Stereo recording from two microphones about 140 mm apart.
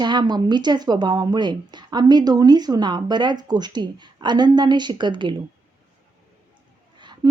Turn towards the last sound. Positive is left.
turn(degrees=-30)  # may be behind; listen again after turning